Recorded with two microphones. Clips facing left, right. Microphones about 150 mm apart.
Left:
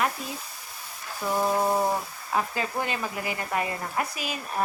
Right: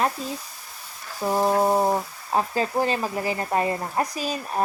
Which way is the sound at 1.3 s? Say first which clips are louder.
Right 4 dB; 25° right (ahead or behind).